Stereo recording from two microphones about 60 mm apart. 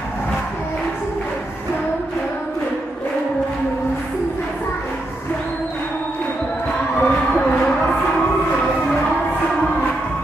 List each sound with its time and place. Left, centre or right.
7.0 s music: centre